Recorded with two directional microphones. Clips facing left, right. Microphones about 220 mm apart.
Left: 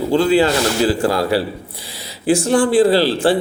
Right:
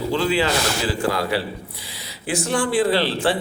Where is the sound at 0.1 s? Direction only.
40° left (ahead or behind).